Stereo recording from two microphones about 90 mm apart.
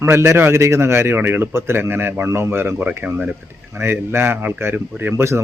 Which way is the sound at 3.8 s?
25° right (ahead or behind).